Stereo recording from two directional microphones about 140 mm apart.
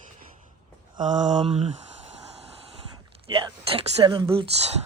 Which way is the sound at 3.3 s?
35° right (ahead or behind).